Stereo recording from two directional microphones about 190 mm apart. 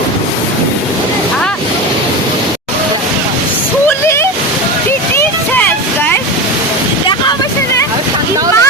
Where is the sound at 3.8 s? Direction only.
15° left (ahead or behind).